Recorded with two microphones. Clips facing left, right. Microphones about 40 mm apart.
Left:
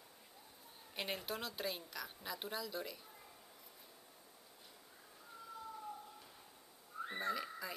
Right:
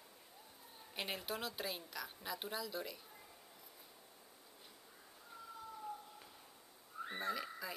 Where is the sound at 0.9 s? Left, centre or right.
Centre.